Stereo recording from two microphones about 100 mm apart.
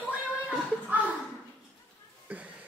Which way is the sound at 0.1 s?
15° right (ahead or behind).